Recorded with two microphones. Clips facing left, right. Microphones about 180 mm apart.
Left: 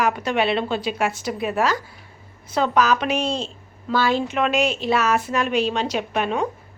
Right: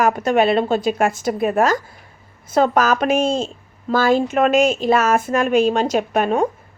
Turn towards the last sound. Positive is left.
turn(degrees=-45)  # may be behind; listen again after turning